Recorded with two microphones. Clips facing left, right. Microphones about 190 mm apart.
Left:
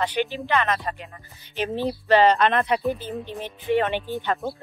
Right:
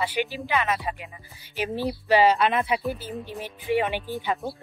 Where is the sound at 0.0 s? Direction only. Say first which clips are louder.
Left 2 dB; 10° right (ahead or behind).